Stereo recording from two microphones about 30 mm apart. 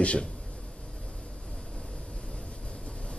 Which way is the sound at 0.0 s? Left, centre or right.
Left.